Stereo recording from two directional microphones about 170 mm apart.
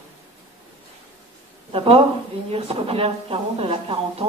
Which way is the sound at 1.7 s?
30° right (ahead or behind).